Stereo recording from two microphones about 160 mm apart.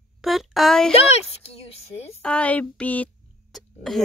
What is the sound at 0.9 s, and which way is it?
A child's voice, 40° left (ahead or behind).